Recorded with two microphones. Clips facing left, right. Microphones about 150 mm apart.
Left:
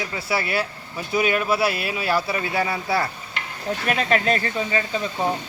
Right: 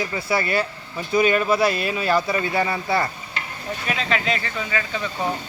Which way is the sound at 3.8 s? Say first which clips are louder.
Left 3 dB; 50° left (ahead or behind).